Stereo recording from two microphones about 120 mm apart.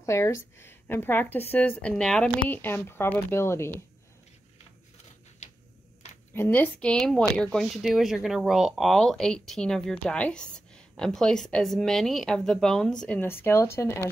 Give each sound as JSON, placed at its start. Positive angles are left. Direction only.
{"t": 0.0, "sound": "a woman's voice", "side_deg": 25}
{"t": 2.6, "sound": "speech", "side_deg": 20}
{"t": 6.3, "sound": "speech", "side_deg": 15}
{"t": 13.2, "sound": "speech", "side_deg": 20}